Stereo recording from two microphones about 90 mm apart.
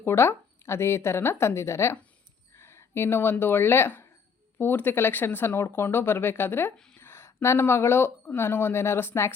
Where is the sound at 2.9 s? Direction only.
25° left (ahead or behind).